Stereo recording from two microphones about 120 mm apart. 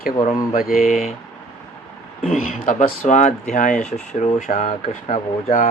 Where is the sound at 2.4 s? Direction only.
90° left.